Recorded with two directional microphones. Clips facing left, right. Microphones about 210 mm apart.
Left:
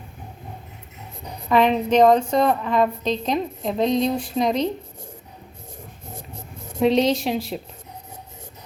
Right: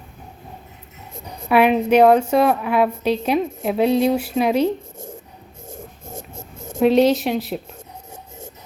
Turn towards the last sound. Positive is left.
turn(degrees=0)  # may be behind; listen again after turning